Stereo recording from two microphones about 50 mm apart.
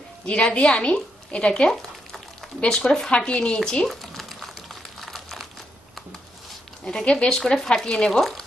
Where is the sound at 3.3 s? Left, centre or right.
Left.